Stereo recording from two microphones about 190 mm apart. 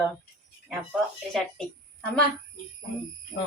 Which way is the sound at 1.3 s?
5° left (ahead or behind).